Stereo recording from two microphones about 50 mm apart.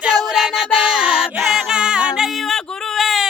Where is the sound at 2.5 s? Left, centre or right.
Centre.